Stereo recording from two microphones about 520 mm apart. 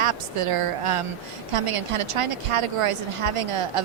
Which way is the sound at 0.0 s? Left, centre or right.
Right.